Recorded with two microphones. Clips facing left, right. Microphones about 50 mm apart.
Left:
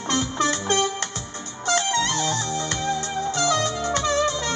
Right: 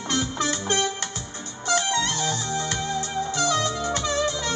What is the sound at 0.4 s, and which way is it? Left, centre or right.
Music, centre.